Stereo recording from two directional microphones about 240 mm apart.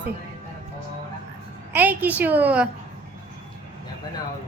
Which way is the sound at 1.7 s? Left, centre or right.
Centre.